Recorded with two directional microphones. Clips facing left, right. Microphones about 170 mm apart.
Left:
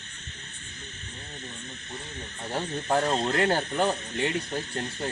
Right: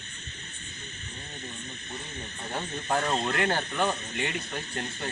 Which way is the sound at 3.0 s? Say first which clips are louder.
Left 3 dB; 35° left (ahead or behind).